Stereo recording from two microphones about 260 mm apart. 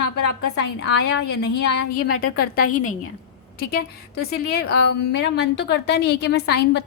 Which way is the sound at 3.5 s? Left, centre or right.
Left.